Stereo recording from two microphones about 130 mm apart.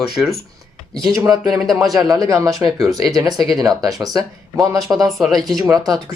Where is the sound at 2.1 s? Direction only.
25° right (ahead or behind).